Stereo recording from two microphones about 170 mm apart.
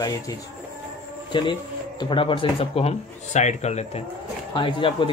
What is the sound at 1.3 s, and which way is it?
Speech, 30° left (ahead or behind).